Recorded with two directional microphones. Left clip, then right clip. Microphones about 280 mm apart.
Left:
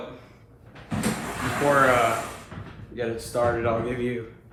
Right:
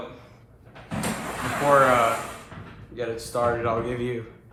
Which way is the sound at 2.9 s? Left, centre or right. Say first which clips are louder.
Left 1 dB; right.